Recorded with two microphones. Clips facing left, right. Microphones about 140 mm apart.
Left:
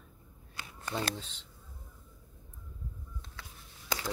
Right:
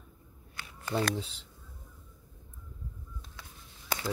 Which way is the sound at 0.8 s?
10° right (ahead or behind).